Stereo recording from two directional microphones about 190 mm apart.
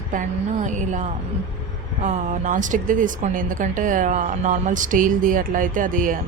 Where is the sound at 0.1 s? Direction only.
40° right (ahead or behind).